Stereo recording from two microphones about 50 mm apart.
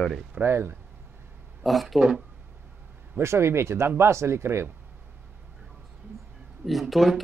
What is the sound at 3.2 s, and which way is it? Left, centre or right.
Speech, right.